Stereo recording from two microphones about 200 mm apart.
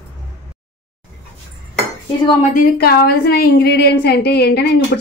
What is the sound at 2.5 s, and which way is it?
A woman's voice, 50° left (ahead or behind).